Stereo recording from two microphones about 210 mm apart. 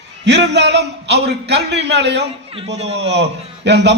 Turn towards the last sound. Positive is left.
turn(degrees=-55)  # may be behind; listen again after turning